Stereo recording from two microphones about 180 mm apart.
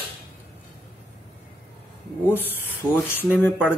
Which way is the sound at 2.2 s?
10° left (ahead or behind).